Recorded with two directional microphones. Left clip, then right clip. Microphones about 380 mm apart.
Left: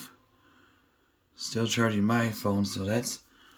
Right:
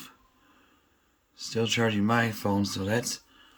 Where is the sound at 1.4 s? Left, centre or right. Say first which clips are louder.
Right 1 dB; centre.